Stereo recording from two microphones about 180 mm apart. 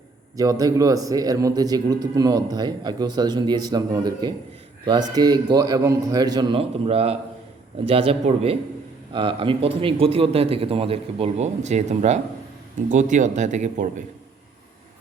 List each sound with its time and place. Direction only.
0.6 s a man's voice: 20° right (ahead or behind); by 14.0 s 45° right (ahead or behind)